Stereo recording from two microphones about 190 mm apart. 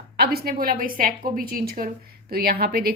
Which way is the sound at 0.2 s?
55° right (ahead or behind).